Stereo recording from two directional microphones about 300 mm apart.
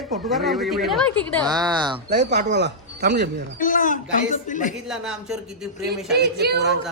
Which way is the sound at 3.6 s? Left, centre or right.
Left.